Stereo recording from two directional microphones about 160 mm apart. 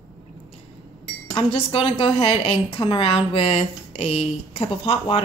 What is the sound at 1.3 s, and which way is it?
Speech, 35° left (ahead or behind).